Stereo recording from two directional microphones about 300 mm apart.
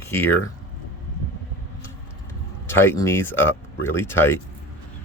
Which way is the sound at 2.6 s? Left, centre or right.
Centre.